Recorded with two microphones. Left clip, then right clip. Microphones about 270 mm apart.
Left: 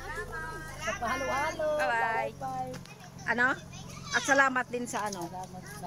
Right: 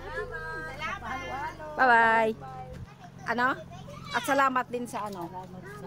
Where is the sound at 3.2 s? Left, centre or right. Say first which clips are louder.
Even; centre.